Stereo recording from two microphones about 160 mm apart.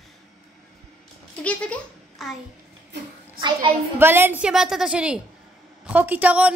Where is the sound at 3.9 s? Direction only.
15° right (ahead or behind).